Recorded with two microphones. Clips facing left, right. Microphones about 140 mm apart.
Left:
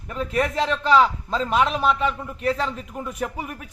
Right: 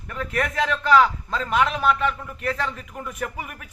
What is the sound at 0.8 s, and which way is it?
A man's voice, 30° left (ahead or behind).